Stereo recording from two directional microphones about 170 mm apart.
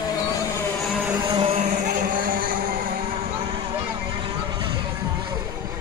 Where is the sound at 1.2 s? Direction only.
30° right (ahead or behind).